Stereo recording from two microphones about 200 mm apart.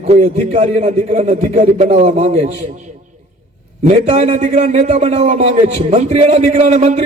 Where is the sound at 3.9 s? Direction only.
35° right (ahead or behind).